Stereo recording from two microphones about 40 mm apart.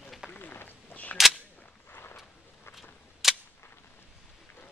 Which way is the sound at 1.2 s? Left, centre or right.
Centre.